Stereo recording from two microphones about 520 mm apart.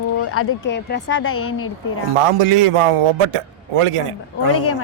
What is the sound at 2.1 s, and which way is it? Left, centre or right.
Speech, right.